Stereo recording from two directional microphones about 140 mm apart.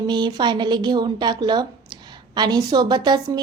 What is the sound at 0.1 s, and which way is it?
A woman's voice, 30° right (ahead or behind).